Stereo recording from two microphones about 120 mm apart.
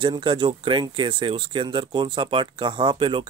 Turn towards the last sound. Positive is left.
turn(degrees=-45)  # may be behind; listen again after turning